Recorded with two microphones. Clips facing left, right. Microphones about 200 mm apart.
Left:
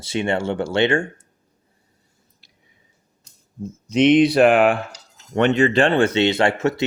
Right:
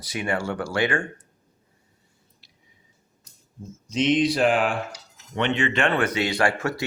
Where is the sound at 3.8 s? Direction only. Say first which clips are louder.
Left 7 dB; 60° left (ahead or behind).